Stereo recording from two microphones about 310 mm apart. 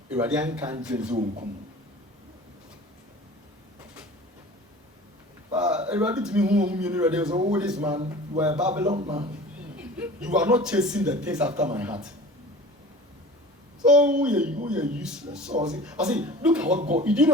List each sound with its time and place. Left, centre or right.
0.1 s speech: centre
5.9 s speech: centre
7.9 s a man's voice: centre
8.4 s speech: centre
8.9 s a man's voice: centre
9.7 s speech: centre
13.8 s speech: centre